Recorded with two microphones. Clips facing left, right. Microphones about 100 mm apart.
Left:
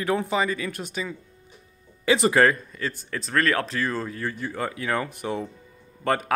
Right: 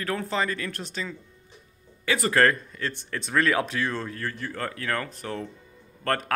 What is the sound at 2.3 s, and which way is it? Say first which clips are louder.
Speech: left 2 dB; 5° left (ahead or behind).